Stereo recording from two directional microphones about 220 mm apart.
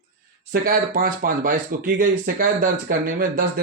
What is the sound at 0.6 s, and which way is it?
Speech, 40° right (ahead or behind).